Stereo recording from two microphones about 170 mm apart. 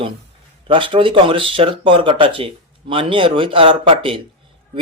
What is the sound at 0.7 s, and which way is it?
Speech, 30° right (ahead or behind).